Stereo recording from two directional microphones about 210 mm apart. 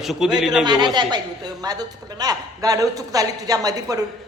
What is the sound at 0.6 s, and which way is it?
A woman's voice, 20° right (ahead or behind).